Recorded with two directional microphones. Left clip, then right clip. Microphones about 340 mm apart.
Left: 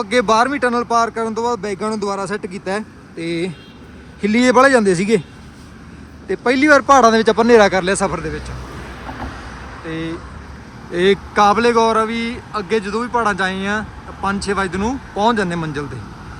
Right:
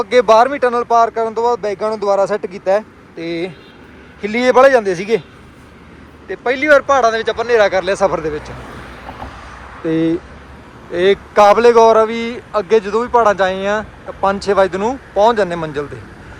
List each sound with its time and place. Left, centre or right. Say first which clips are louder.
0.0 s speech: right 5 dB; centre
6.2 s speech: even; centre
10.9 s a man's voice: right 3 dB; centre